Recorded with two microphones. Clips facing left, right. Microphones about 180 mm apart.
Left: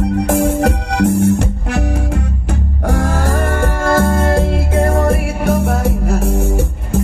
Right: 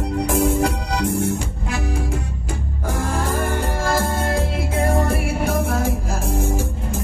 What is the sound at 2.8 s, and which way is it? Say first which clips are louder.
Music: left 6 dB; 70° left (ahead or behind).